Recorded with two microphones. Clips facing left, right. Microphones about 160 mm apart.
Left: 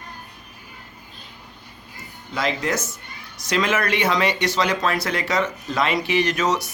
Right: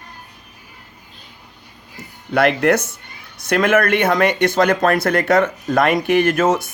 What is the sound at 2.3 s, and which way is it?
Speech, 65° right (ahead or behind).